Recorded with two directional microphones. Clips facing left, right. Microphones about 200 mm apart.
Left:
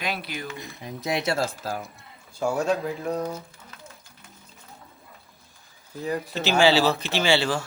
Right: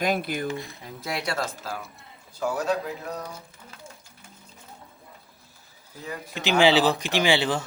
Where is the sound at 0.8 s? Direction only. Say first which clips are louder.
Left 4 dB; 20° left (ahead or behind).